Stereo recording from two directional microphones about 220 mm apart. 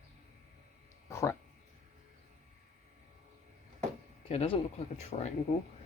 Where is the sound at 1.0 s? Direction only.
15° left (ahead or behind).